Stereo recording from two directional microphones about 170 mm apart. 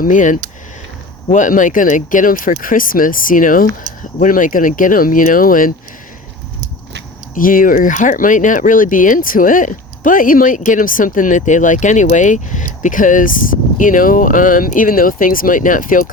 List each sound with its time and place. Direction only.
0.0 s speech: 50° left (ahead or behind)
7.3 s speech: 55° left (ahead or behind)